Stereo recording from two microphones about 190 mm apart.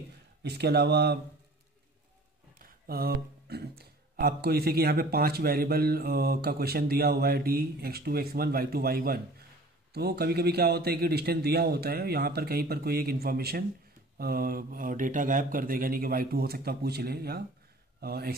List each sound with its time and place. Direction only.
0.4 s a man's voice: 60° right (ahead or behind)
2.6 s a man's voice: 50° right (ahead or behind)